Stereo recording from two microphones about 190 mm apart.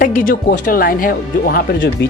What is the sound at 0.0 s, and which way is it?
Speech, 45° left (ahead or behind).